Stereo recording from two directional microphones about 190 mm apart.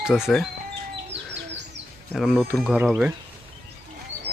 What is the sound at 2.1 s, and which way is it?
Speech, centre (ahead or behind).